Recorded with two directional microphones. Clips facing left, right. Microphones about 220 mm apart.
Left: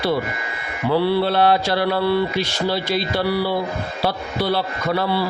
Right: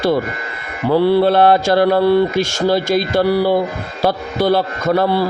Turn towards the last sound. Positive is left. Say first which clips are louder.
# right 6 dB
turn(degrees=-45)  # may be behind; listen again after turning